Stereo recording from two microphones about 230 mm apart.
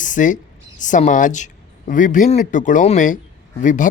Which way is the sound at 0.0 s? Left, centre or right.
Left.